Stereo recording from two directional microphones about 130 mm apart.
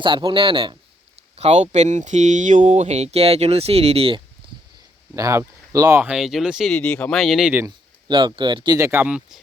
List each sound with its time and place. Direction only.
0.0 s speech: 40° right (ahead or behind)
5.1 s speech: 25° right (ahead or behind)
6.0 s speech: 5° right (ahead or behind)
6.7 s speech: 10° left (ahead or behind)
8.0 s speech: 35° right (ahead or behind)
8.8 s speech: 15° right (ahead or behind)